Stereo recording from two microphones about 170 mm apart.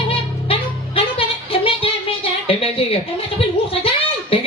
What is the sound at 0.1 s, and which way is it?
Music, 35° left (ahead or behind).